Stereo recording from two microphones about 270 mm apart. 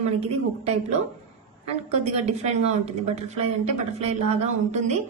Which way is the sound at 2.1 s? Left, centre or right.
Right.